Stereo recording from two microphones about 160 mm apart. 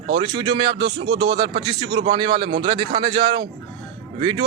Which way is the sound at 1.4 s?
30° right (ahead or behind).